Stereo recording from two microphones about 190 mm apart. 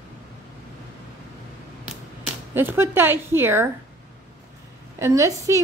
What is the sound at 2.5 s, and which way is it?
Speech, 10° right (ahead or behind).